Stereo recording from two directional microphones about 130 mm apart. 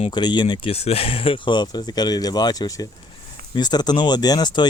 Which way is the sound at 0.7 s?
50° left (ahead or behind).